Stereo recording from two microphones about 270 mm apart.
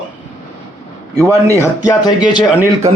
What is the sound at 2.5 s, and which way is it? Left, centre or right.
Speech, centre.